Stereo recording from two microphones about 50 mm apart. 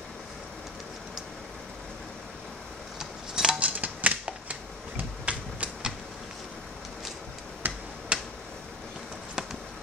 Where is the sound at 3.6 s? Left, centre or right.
Right.